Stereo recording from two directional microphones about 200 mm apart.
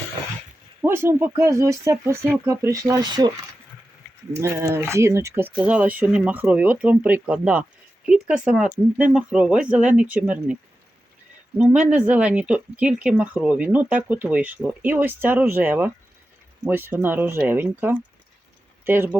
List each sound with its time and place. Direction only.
0.8 s speech: 10° right (ahead or behind)
4.4 s speech: 15° right (ahead or behind)